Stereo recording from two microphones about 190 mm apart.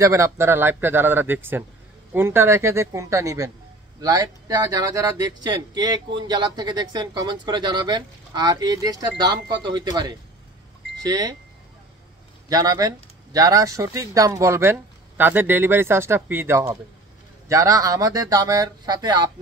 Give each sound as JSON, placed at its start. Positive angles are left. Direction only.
{"t": 0.0, "sound": "speech", "side_deg": -15}
{"t": 11.0, "sound": "speech", "side_deg": -20}
{"t": 12.4, "sound": "speech", "side_deg": -20}